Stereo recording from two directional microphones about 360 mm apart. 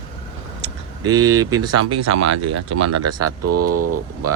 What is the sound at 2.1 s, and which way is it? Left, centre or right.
Speech, right.